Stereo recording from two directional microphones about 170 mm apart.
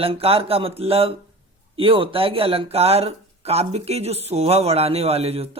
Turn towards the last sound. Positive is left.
turn(degrees=-35)  # may be behind; listen again after turning